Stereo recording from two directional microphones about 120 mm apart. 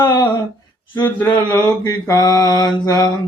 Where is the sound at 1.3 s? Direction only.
10° left (ahead or behind).